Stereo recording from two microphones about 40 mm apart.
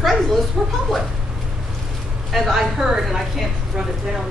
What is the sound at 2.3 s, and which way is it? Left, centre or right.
Speech, centre.